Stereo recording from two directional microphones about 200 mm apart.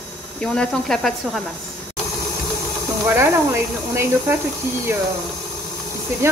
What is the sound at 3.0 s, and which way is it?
Speech, 10° right (ahead or behind).